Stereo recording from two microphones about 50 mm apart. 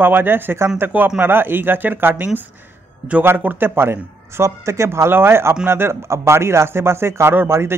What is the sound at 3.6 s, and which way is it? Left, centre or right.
Speech, right.